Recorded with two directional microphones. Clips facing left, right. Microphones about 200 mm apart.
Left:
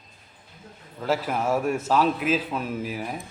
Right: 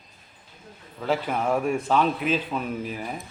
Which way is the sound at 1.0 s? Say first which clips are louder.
Even; 5° left (ahead or behind).